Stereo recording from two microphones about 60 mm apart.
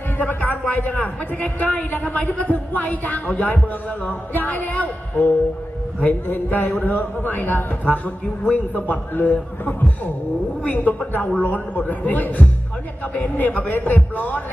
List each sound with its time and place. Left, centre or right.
0.2 s a man's voice: left